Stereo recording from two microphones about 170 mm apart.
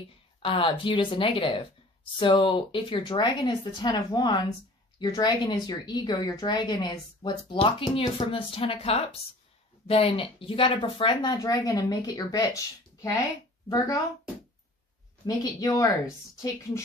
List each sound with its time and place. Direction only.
0.4 s a woman's voice: 30° left (ahead or behind)
15.2 s speech: 20° left (ahead or behind)